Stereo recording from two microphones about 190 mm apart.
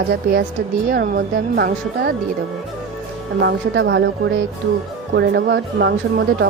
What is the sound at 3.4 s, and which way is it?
A woman's voice, 65° right (ahead or behind).